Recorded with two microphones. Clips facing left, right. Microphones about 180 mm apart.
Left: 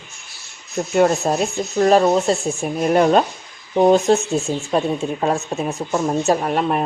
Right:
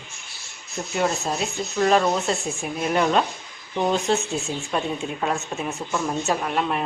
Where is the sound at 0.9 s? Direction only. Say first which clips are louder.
Left 8 dB; 50° left (ahead or behind).